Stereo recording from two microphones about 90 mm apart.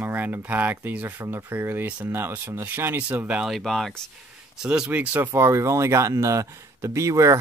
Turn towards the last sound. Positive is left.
turn(degrees=-35)  # may be behind; listen again after turning